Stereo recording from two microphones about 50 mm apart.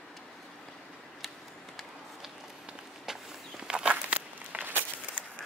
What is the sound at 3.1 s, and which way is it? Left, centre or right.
Walk, centre.